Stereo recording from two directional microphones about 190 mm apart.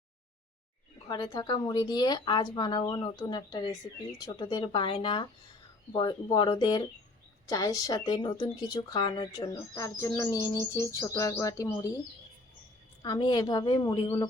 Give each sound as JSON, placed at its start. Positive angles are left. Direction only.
{"t": 1.0, "sound": "speech", "side_deg": 20}
{"t": 13.0, "sound": "speech", "side_deg": 20}